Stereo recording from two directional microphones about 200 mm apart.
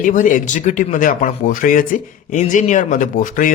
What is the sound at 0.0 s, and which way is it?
Speech, 40° left (ahead or behind).